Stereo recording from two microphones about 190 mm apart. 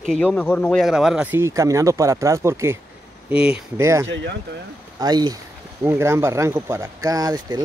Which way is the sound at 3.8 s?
15° right (ahead or behind).